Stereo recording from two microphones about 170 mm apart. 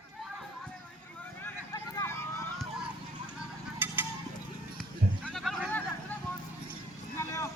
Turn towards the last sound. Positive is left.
turn(degrees=20)  # may be behind; listen again after turning